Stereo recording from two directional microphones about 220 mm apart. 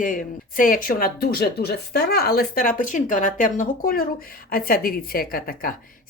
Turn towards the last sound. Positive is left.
turn(degrees=40)  # may be behind; listen again after turning